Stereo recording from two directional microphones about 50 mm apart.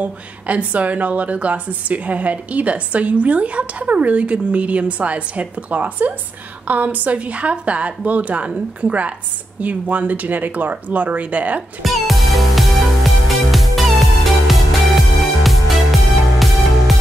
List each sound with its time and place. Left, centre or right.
0.0 s a woman's voice: right
9.6 s speech: right
11.8 s music: centre